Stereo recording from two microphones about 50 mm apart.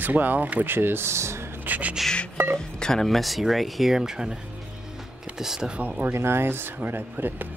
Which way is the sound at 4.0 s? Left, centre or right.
Centre.